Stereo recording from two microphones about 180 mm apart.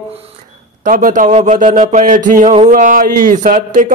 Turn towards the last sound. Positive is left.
turn(degrees=-45)  # may be behind; listen again after turning